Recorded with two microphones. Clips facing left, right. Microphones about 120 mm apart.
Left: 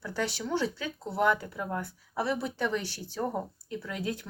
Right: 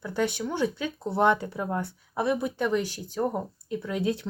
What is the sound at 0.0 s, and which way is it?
Speech, 20° right (ahead or behind).